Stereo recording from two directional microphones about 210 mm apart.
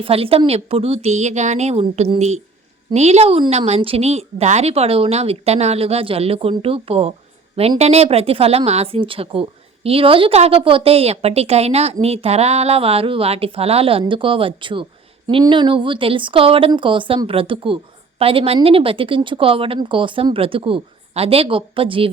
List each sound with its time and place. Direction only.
0.0 s a woman's voice: 25° right (ahead or behind)